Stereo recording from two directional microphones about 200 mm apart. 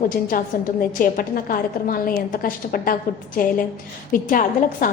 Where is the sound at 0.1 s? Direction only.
45° left (ahead or behind).